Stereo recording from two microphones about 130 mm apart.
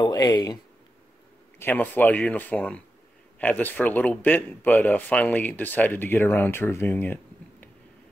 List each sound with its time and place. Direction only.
0.0 s speech: 30° left (ahead or behind)
1.6 s speech: 15° left (ahead or behind)